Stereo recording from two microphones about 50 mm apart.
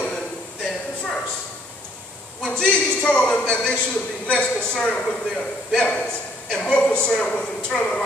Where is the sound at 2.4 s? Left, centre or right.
Centre.